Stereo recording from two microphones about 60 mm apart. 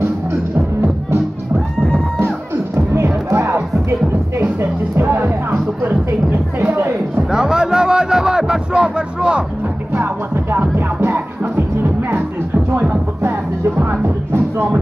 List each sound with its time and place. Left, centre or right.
2.7 s music: right
6.6 s music: right
7.2 s a sound: centre
10.3 s music: right
13.7 s music: right